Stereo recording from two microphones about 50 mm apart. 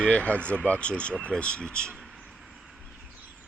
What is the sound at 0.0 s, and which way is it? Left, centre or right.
Speech, left.